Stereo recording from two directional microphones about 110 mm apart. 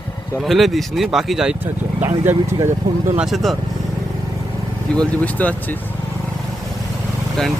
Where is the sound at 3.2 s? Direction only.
Centre (ahead or behind).